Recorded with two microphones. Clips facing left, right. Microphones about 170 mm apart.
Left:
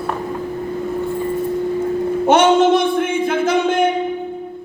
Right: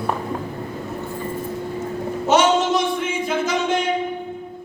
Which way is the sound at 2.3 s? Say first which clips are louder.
Left 5 dB; 55° left (ahead or behind).